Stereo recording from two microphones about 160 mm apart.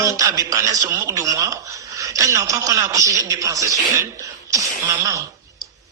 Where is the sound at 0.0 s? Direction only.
20° right (ahead or behind).